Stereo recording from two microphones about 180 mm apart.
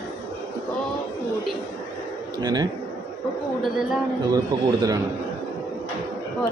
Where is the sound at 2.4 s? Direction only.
20° right (ahead or behind).